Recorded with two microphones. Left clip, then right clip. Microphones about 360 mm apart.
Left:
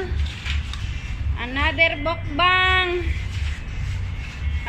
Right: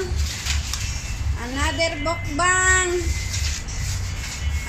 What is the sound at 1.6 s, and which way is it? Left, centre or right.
Speech, centre.